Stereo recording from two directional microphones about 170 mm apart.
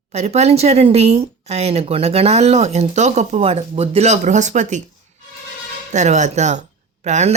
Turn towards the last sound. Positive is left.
turn(degrees=-45)  # may be behind; listen again after turning